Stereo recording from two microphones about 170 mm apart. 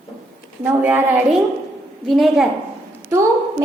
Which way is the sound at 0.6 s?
10° right (ahead or behind).